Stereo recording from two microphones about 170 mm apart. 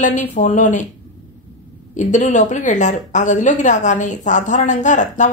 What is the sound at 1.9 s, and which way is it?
A woman's voice, 45° left (ahead or behind).